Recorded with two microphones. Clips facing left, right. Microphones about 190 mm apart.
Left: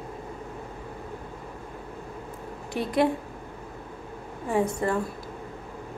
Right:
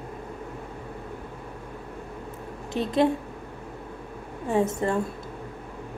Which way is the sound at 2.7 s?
10° left (ahead or behind).